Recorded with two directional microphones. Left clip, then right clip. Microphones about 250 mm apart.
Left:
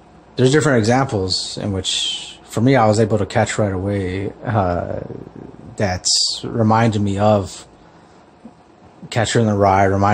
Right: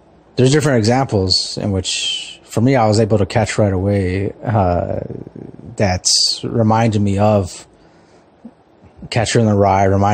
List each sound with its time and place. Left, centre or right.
0.4 s speech: right
9.1 s speech: right